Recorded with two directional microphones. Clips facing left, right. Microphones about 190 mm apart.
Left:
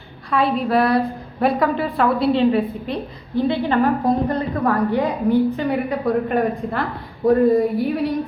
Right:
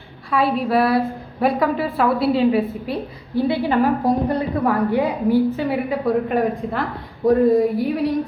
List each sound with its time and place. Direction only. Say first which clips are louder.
0.3 s a woman's voice: even; centre (ahead or behind)